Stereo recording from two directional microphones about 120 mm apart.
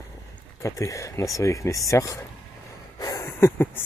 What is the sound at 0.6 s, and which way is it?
Speech, 25° left (ahead or behind).